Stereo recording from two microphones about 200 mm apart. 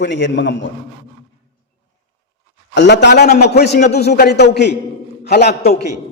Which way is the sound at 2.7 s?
60° left (ahead or behind).